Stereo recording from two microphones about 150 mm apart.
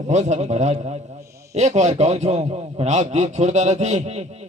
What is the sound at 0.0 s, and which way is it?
A man's voice, 50° right (ahead or behind).